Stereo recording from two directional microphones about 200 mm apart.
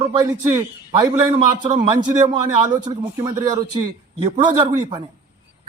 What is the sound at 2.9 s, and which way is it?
Speech, 20° right (ahead or behind).